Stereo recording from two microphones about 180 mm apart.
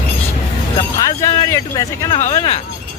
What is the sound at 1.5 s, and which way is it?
Speech, 20° left (ahead or behind).